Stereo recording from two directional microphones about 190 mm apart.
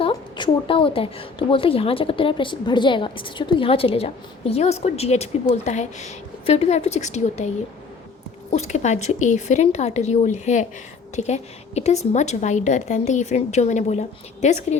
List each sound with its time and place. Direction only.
0.0 s a woman's voice: 25° left (ahead or behind)